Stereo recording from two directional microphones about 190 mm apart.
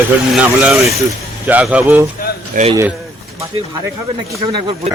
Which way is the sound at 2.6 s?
45° right (ahead or behind).